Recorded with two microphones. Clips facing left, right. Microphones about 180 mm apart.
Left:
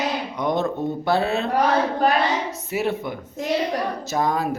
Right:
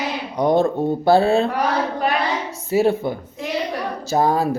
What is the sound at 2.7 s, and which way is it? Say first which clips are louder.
Speech: right 8 dB; 30° right (ahead or behind).